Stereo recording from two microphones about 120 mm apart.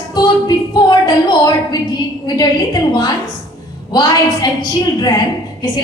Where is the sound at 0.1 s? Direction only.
35° left (ahead or behind).